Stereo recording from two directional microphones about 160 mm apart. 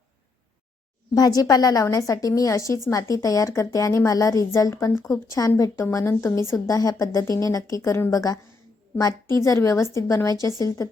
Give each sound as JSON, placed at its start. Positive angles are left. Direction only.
{"t": 1.1, "sound": "a woman's voice", "side_deg": 25}